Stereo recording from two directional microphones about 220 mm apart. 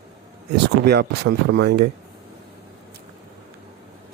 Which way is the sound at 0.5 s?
45° right (ahead or behind).